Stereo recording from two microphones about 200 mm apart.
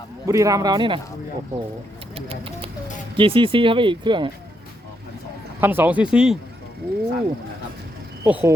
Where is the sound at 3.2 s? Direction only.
25° right (ahead or behind).